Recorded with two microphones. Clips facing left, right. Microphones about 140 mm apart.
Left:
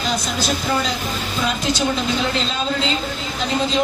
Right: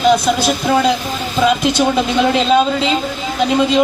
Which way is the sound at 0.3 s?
60° right (ahead or behind).